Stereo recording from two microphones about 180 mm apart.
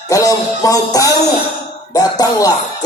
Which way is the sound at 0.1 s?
20° left (ahead or behind).